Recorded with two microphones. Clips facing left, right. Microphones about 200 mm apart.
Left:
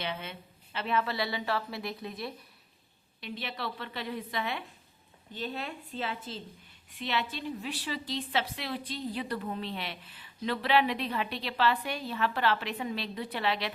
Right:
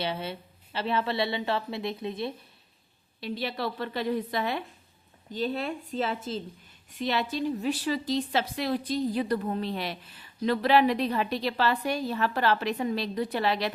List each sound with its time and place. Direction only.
0.0 s a woman's voice: 35° right (ahead or behind)
3.2 s a woman's voice: 35° right (ahead or behind)